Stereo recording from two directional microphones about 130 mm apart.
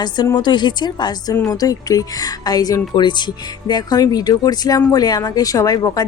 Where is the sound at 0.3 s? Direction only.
35° left (ahead or behind).